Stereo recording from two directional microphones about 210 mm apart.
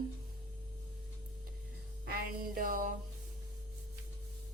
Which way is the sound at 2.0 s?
45° right (ahead or behind).